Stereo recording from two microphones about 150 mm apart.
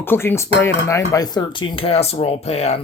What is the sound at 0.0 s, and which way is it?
Speech, 15° left (ahead or behind).